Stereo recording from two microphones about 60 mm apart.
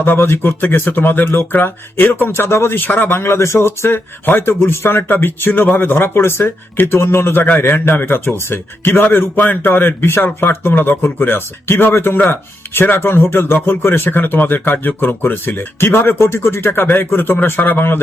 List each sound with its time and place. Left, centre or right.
0.0 s speech: left
5.0 s speech: left